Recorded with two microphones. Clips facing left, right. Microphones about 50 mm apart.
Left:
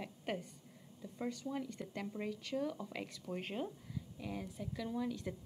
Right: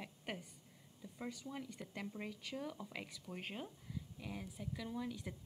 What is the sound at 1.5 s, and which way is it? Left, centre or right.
A woman's voice, centre.